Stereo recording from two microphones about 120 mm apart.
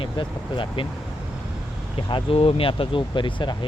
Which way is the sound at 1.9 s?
50° left (ahead or behind).